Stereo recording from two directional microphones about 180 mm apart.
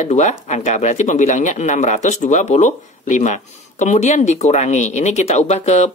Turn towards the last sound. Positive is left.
turn(degrees=40)  # may be behind; listen again after turning